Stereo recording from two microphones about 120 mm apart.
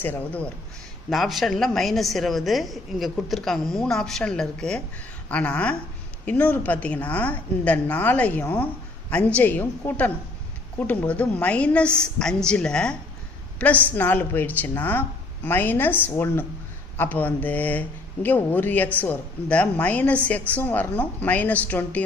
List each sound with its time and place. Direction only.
0.0 s speech: 15° left (ahead or behind)
1.1 s a woman's voice: centre (ahead or behind)